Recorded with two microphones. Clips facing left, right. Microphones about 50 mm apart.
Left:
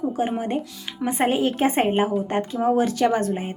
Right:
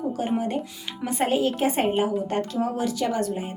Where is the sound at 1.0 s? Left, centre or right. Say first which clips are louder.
Left 2 dB; left.